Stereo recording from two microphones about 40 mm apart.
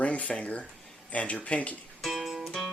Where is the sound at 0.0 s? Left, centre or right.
Left.